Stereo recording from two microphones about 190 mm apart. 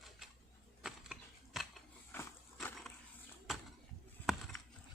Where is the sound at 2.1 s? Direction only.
10° left (ahead or behind).